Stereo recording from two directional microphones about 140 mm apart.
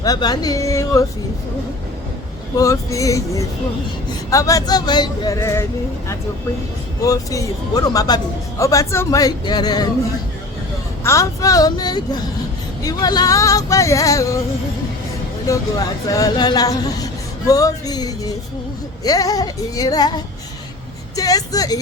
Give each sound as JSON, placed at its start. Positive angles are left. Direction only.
{"t": 0.0, "sound": "speech", "side_deg": 30}
{"t": 2.6, "sound": "speech", "side_deg": 25}
{"t": 7.0, "sound": "speech", "side_deg": 25}
{"t": 11.0, "sound": "speech", "side_deg": 20}
{"t": 15.4, "sound": "speech", "side_deg": 25}
{"t": 21.2, "sound": "speech", "side_deg": 25}